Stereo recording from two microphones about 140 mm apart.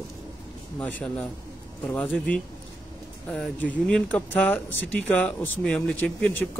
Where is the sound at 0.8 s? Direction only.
5° left (ahead or behind).